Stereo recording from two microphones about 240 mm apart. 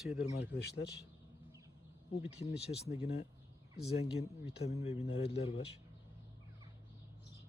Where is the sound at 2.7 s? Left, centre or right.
Left.